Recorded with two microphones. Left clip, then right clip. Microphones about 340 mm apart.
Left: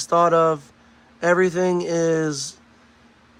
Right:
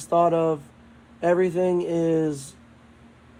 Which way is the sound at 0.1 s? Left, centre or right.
Left.